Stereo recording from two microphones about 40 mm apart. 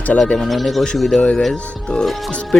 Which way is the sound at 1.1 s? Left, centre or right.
Left.